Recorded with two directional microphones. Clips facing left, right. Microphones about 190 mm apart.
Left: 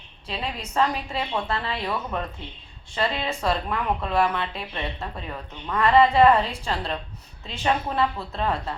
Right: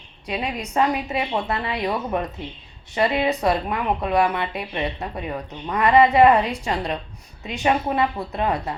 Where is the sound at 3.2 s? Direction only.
15° right (ahead or behind).